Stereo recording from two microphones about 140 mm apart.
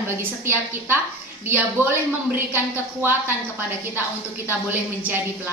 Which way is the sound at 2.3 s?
15° right (ahead or behind).